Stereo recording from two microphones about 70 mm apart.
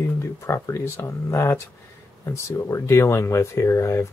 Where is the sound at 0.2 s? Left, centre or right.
Left.